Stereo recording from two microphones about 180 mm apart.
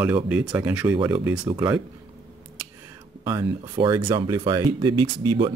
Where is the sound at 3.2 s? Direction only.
20° right (ahead or behind).